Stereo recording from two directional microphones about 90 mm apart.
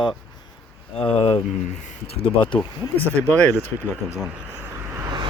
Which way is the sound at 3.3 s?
20° left (ahead or behind).